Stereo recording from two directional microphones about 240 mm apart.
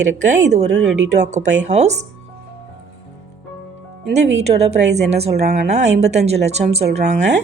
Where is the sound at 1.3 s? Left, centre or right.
Right.